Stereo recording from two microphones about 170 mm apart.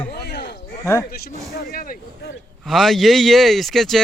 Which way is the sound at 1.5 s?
60° left (ahead or behind).